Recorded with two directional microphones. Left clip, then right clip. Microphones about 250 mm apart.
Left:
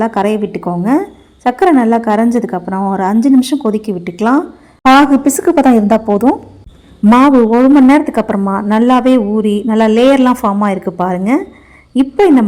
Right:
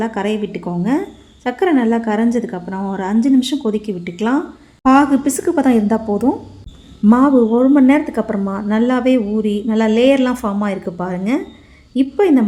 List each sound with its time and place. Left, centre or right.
0.0 s a woman's voice: centre